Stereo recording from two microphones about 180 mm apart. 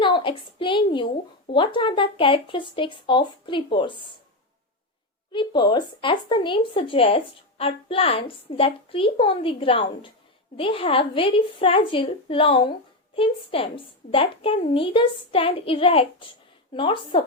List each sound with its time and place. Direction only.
0.0 s a sound: 25° left (ahead or behind)
1.5 s a woman's voice: 25° left (ahead or behind)
5.3 s a woman's voice: 25° left (ahead or behind)